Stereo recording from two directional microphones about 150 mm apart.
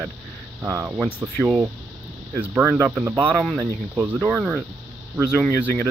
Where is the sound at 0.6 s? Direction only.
15° right (ahead or behind).